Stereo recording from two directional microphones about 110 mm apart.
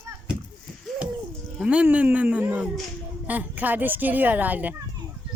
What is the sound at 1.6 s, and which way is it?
A child's voice, 10° right (ahead or behind).